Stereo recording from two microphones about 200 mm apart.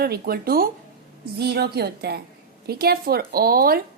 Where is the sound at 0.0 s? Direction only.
50° right (ahead or behind).